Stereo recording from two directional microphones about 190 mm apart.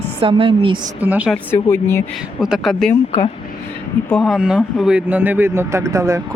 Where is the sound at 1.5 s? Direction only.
10° left (ahead or behind).